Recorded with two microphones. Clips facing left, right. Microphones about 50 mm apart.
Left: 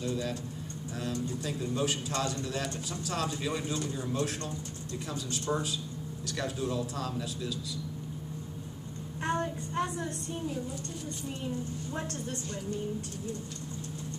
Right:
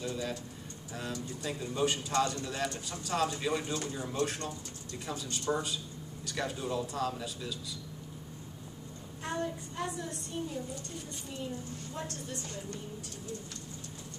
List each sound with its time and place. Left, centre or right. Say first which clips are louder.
0.0 s speech: left 3 dB; centre
1.4 s speech: right 3 dB; centre
9.2 s child singing: left 4 dB; left